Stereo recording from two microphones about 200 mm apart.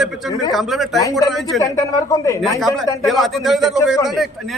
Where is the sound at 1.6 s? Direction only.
15° left (ahead or behind).